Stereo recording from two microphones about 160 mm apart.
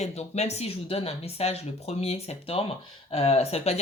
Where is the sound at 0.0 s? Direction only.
45° left (ahead or behind).